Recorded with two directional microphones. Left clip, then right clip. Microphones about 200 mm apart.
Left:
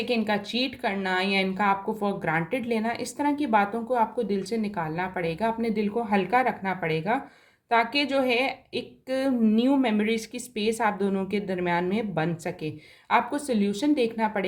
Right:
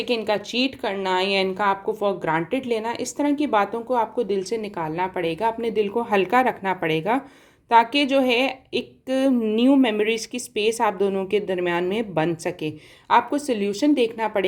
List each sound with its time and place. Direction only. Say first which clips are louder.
0.0 s speech: right 3 dB; 25° right (ahead or behind)